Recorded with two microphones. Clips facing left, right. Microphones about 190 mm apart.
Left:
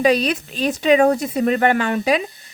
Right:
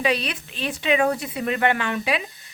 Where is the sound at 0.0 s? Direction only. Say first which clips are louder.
Left 7 dB; 40° left (ahead or behind).